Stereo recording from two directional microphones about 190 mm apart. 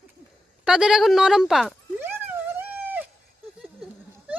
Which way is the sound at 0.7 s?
5° right (ahead or behind).